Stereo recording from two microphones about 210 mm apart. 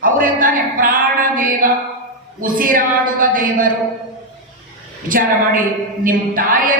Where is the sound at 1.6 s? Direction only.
40° right (ahead or behind).